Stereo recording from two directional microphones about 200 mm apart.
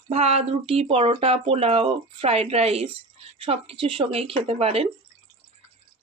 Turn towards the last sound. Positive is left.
turn(degrees=-30)  # may be behind; listen again after turning